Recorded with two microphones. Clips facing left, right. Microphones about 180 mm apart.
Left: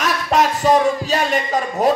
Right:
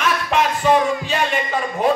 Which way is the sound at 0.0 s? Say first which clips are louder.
Left 2 dB; 40° left (ahead or behind).